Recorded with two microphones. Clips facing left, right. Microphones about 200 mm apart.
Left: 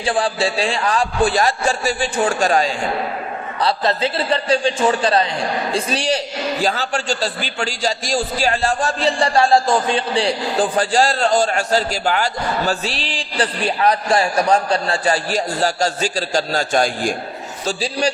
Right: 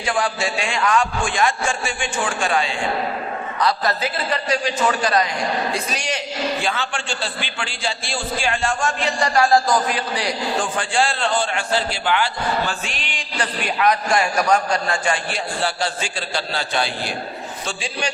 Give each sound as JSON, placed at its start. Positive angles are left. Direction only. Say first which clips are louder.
{"t": 0.0, "sound": "a man's voice", "louder": "left 3 dB", "side_deg": 30}
{"t": 3.6, "sound": "a man's voice", "louder": "left 3 dB", "side_deg": 30}